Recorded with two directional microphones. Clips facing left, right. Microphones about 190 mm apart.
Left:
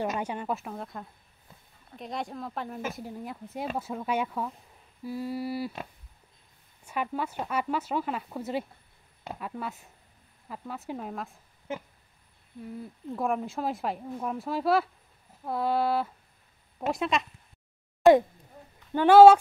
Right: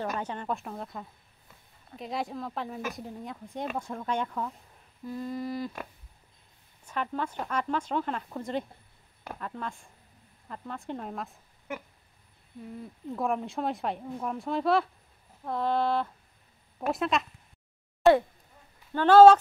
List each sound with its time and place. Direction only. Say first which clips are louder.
0.0 s a woman's voice: left 2 dB; 15° left (ahead or behind)
6.8 s speech: left 1 dB; 10° left (ahead or behind)
9.2 s speech: left 1 dB; 20° left (ahead or behind)
9.5 s a woman's voice: left 1 dB; 5° left (ahead or behind)
12.5 s a woman's voice: left 2 dB; centre (ahead or behind)
18.9 s speech: left 1 dB; 10° left (ahead or behind)